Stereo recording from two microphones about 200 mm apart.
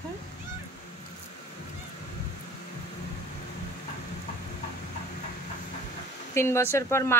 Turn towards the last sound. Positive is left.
turn(degrees=15)  # may be behind; listen again after turning